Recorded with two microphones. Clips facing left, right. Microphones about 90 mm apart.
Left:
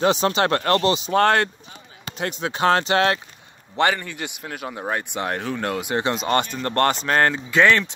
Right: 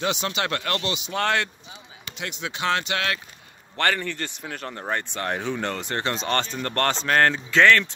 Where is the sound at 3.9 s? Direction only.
10° left (ahead or behind).